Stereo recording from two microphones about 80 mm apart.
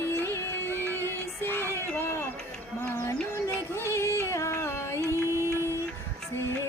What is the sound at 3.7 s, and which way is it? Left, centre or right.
Music, left.